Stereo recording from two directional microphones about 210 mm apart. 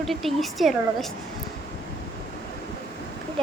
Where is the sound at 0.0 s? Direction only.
Centre (ahead or behind).